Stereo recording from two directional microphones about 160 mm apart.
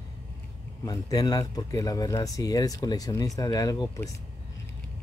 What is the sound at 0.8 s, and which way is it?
Speech, 25° left (ahead or behind).